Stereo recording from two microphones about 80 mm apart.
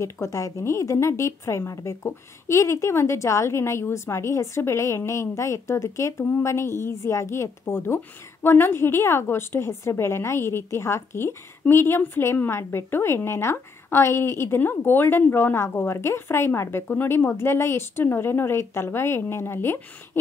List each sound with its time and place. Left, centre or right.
0.0 s a woman's voice: left